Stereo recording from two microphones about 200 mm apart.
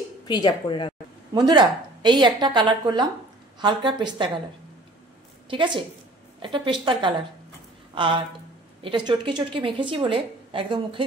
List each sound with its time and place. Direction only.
0.3 s a woman's voice: 20° left (ahead or behind)
1.3 s a woman's voice: 20° right (ahead or behind)
5.5 s a woman's voice: 25° right (ahead or behind)